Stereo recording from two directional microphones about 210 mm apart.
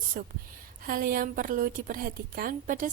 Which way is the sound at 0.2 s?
50° right (ahead or behind).